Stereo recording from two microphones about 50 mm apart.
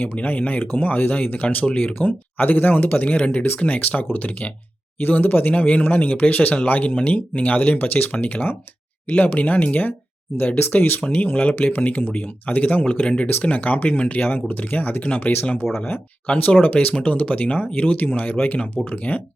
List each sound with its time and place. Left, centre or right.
0.0 s speech: left
11.0 s speech: left
15.6 s speech: left
16.2 s speech: left